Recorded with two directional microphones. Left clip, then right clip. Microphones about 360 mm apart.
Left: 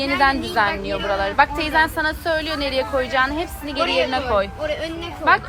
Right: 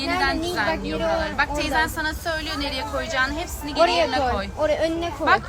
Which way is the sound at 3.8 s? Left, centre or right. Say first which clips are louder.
Right 1 dB; right.